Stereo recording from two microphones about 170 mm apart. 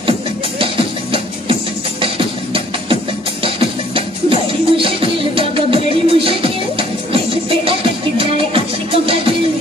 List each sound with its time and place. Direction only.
0.6 s music: 30° right (ahead or behind)